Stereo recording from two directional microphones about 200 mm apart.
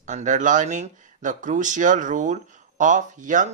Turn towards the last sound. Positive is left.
turn(degrees=-40)  # may be behind; listen again after turning